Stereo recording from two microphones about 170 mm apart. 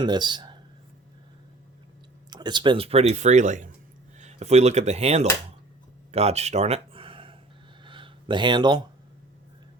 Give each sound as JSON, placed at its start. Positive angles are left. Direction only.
{"t": 0.0, "sound": "speech", "side_deg": -25}
{"t": 2.3, "sound": "speech", "side_deg": -25}
{"t": 6.1, "sound": "a sound", "side_deg": -40}